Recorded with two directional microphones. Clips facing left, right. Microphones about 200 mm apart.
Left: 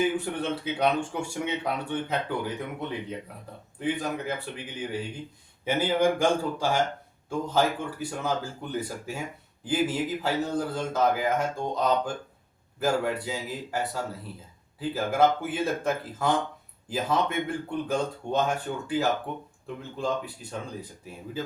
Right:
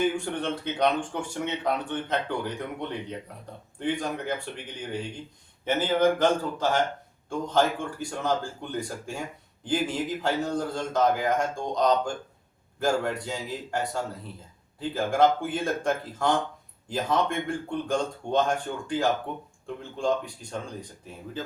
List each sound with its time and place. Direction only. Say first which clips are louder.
0.0 s speech: even; 5° left (ahead or behind)